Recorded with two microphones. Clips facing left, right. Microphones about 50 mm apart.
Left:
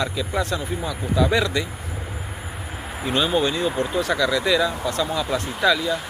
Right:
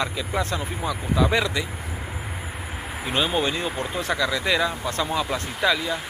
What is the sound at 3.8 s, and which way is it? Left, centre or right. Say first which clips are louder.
Speech: left 4 dB; right.